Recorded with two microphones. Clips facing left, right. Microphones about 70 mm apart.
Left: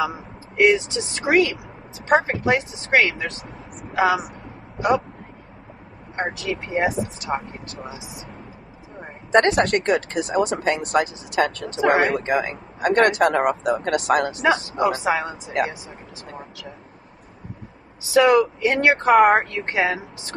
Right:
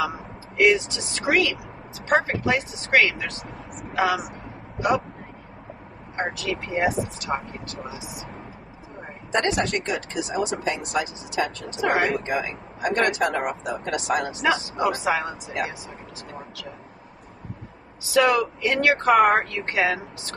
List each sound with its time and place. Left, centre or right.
0.0 s speech: left
6.4 s speech: left
9.3 s speech: left
11.8 s speech: left
12.1 s speech: left
14.8 s speech: left
18.1 s speech: left